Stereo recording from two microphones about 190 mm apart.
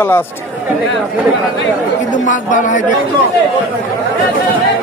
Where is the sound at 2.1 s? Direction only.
40° left (ahead or behind).